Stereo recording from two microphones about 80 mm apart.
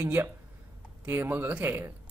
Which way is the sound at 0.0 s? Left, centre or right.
Right.